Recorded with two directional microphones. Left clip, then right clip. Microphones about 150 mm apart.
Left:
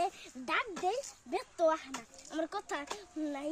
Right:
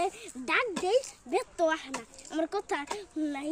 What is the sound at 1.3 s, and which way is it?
Speech, 5° left (ahead or behind).